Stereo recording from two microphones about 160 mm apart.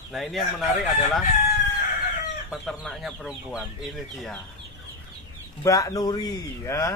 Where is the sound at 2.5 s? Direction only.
Centre (ahead or behind).